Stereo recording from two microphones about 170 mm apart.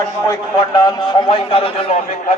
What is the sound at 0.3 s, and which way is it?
A man's voice, 25° left (ahead or behind).